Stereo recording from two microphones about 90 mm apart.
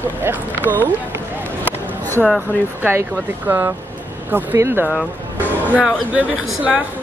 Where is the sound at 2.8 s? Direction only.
25° right (ahead or behind).